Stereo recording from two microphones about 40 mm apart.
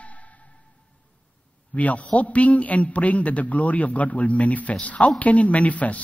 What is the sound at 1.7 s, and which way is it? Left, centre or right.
A man's voice, left.